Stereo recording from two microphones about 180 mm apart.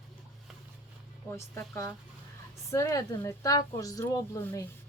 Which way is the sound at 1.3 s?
15° left (ahead or behind).